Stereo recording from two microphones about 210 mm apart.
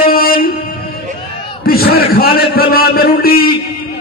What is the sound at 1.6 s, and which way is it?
A man's voice, 45° left (ahead or behind).